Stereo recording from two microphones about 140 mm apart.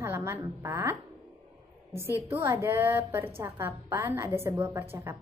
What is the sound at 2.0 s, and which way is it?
A woman's voice, 20° right (ahead or behind).